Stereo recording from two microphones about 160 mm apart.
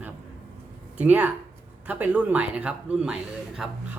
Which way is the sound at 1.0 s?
10° right (ahead or behind).